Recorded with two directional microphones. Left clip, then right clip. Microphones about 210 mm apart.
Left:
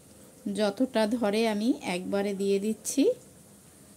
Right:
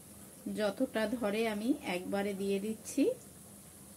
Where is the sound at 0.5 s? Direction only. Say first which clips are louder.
Left 7 dB; 50° left (ahead or behind).